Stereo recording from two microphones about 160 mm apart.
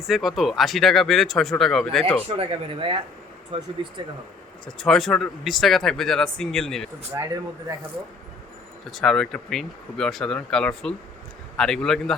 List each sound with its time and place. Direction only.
0.0 s speech: centre (ahead or behind)
2.4 s speech: 35° right (ahead or behind)
4.6 s speech: 5° left (ahead or behind)
8.9 s speech: centre (ahead or behind)